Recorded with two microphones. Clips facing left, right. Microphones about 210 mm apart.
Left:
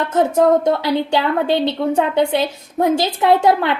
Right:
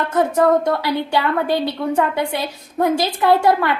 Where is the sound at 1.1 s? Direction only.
25° left (ahead or behind).